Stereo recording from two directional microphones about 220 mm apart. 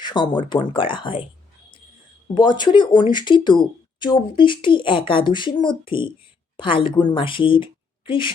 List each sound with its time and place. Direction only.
0.0 s speech: 20° left (ahead or behind)
2.3 s speech: 20° left (ahead or behind)